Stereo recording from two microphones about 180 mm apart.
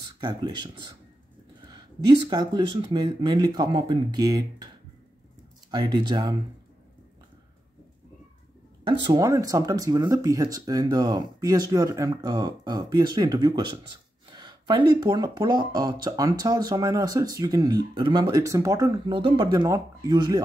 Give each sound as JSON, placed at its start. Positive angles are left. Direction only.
{"t": 0.2, "sound": "speech", "side_deg": -25}
{"t": 1.7, "sound": "speech", "side_deg": -25}
{"t": 5.7, "sound": "speech", "side_deg": -25}
{"t": 9.0, "sound": "speech", "side_deg": -20}